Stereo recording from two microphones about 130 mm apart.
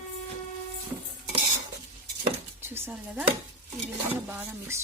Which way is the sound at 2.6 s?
20° right (ahead or behind).